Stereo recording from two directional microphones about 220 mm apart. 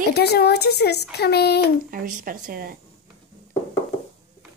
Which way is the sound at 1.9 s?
40° right (ahead or behind).